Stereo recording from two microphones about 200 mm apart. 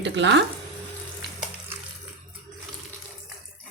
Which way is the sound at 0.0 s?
65° right (ahead or behind).